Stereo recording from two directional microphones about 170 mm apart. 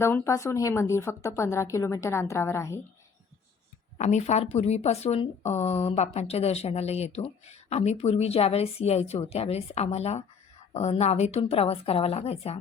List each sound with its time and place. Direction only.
0.0 s a woman's voice: 15° left (ahead or behind)
3.9 s speech: 45° left (ahead or behind)